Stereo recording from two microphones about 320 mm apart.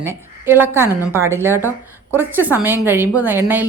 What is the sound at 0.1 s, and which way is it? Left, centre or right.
A woman's voice, centre.